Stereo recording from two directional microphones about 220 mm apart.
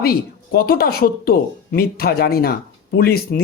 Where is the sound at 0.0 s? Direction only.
45° left (ahead or behind).